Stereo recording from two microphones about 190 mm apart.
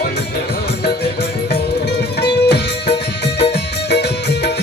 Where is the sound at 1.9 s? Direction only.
60° left (ahead or behind).